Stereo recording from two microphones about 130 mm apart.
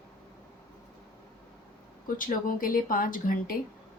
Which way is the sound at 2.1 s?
90° left.